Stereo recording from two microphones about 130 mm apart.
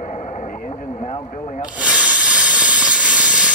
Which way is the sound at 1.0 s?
60° left (ahead or behind).